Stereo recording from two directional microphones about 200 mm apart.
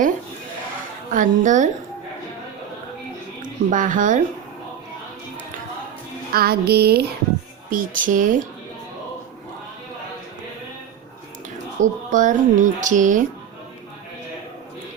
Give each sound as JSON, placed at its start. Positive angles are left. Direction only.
{"t": 1.1, "sound": "speech", "side_deg": -40}
{"t": 3.4, "sound": "speech", "side_deg": -40}
{"t": 6.3, "sound": "music", "side_deg": -50}
{"t": 7.7, "sound": "speech", "side_deg": -40}
{"t": 11.8, "sound": "speech", "side_deg": -40}